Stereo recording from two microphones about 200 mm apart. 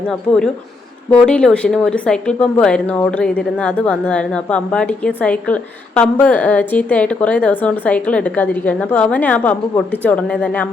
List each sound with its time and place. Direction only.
0.1 s speech: 5° left (ahead or behind)